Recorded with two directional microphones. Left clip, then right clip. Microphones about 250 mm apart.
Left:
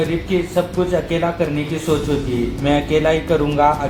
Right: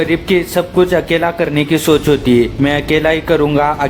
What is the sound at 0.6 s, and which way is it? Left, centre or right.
Speech, right.